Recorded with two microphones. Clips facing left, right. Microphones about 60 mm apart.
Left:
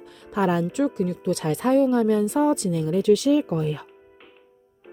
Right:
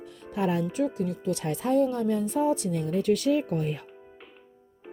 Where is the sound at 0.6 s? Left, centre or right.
Left.